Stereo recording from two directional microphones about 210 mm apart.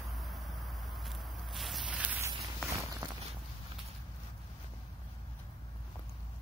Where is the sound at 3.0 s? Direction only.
20° right (ahead or behind).